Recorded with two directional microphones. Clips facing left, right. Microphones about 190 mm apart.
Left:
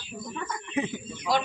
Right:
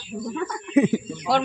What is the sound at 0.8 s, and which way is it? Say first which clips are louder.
Speech: right 12 dB; 70° right (ahead or behind).